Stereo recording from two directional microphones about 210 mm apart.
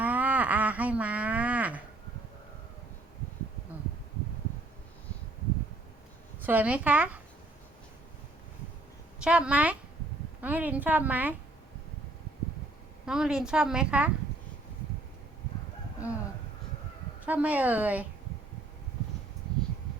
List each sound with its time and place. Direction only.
0.0 s a sound: 5° right (ahead or behind)
6.4 s a woman's voice: 5° right (ahead or behind)
9.2 s a woman's voice: 5° right (ahead or behind)
13.1 s a woman's voice: 5° right (ahead or behind)
16.0 s a woman's voice: 5° right (ahead or behind)
17.2 s a woman's voice: 5° right (ahead or behind)